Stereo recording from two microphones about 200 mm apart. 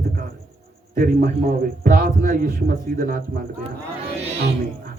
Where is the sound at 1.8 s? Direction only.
45° right (ahead or behind).